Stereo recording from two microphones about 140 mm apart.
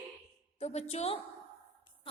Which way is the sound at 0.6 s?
50° left (ahead or behind).